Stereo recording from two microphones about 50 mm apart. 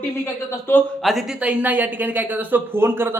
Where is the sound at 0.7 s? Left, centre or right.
Left.